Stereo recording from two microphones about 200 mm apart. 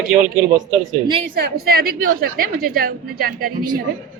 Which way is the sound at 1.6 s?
50° right (ahead or behind).